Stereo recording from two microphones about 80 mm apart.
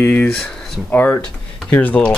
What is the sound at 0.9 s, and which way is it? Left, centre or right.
Speech, left.